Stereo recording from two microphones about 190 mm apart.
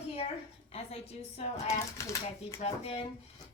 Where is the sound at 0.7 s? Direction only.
35° left (ahead or behind).